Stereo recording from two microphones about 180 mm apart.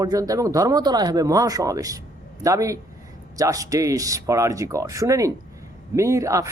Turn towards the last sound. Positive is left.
turn(degrees=-15)  # may be behind; listen again after turning